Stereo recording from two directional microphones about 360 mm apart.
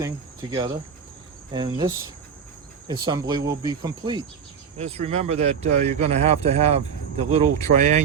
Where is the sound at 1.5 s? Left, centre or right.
Centre.